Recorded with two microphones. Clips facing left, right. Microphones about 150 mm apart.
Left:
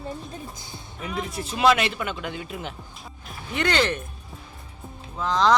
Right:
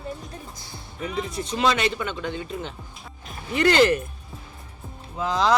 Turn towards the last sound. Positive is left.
turn(degrees=-5)  # may be behind; listen again after turning